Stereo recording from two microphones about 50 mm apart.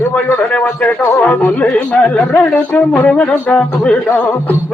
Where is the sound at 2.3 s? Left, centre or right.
Left.